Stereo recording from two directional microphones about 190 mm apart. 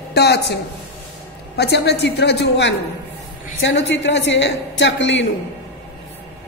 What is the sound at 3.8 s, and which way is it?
A woman's voice, 70° left (ahead or behind).